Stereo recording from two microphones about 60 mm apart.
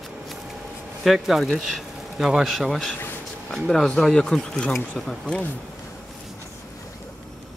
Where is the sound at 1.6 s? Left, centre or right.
Centre.